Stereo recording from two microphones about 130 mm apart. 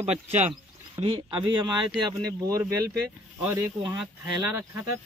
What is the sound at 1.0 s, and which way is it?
Speech, 40° right (ahead or behind).